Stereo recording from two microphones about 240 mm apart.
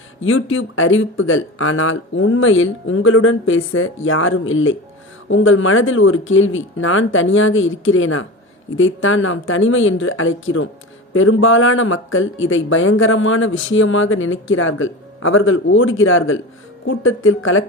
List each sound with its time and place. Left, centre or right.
0.3 s speech: left